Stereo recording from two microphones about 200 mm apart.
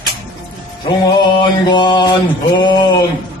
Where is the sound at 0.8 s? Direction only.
20° left (ahead or behind).